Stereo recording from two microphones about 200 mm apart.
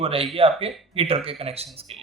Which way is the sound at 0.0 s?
30° right (ahead or behind).